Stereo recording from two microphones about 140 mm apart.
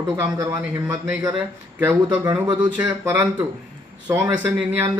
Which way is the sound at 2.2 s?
30° right (ahead or behind).